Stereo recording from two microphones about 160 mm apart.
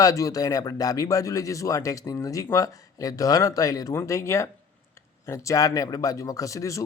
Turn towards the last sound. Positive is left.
turn(degrees=20)  # may be behind; listen again after turning